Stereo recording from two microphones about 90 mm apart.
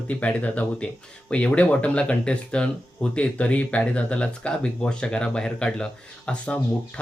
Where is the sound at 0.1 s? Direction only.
15° left (ahead or behind).